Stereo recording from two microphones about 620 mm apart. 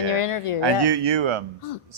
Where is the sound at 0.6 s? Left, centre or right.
Right.